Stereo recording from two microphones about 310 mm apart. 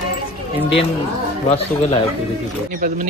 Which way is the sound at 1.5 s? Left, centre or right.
Centre.